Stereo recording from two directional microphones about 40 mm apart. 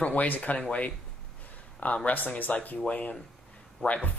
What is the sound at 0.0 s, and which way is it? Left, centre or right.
Speech, left.